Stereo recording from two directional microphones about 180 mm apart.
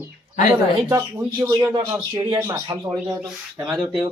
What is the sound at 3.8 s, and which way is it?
Speech, 20° right (ahead or behind).